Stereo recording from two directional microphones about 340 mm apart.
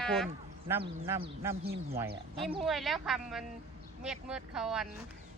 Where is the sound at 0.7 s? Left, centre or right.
Centre.